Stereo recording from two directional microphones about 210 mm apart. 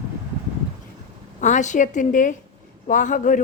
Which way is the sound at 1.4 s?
35° left (ahead or behind).